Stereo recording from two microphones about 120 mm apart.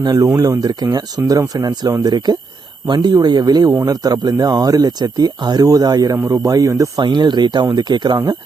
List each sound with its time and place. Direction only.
0.0 s speech: 35° right (ahead or behind)
7.0 s speech: 40° right (ahead or behind)